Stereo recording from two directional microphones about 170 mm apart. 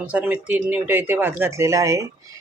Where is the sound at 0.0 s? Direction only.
10° right (ahead or behind).